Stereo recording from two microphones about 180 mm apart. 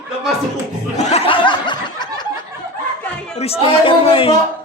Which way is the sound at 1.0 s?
35° left (ahead or behind).